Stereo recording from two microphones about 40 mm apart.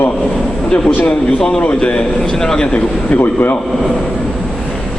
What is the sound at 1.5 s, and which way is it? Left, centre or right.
A man's voice, left.